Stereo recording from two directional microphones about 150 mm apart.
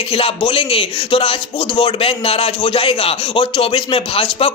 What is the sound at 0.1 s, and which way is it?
A man's voice, 40° left (ahead or behind).